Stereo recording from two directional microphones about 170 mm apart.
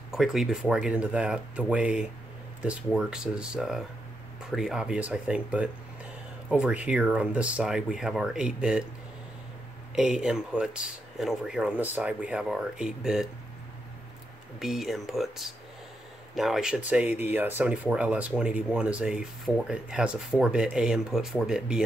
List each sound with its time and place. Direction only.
0.1 s speech: centre (ahead or behind)
9.9 s speech: 5° right (ahead or behind)
14.6 s speech: centre (ahead or behind)